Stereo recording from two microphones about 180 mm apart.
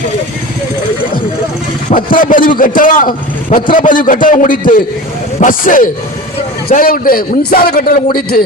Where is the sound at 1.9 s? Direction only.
50° left (ahead or behind).